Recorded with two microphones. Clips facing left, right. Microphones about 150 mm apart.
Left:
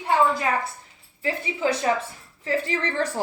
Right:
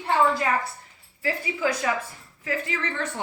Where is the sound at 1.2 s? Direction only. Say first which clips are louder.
Left 1 dB; 25° left (ahead or behind).